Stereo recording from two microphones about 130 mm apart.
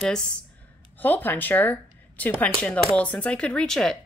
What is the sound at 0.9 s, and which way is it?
Speech, 15° left (ahead or behind).